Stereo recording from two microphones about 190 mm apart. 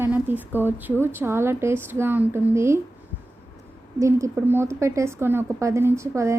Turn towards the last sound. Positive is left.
turn(degrees=-15)  # may be behind; listen again after turning